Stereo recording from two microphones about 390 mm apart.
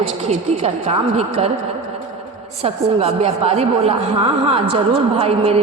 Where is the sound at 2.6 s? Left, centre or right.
Centre.